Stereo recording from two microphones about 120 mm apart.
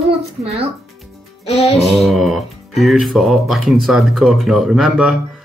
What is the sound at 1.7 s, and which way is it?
Speech, centre (ahead or behind).